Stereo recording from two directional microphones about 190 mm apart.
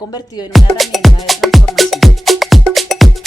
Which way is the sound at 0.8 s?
Centre (ahead or behind).